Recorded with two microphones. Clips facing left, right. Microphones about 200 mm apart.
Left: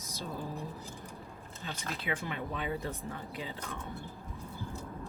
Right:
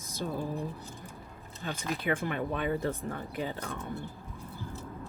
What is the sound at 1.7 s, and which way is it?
Speech, 50° right (ahead or behind).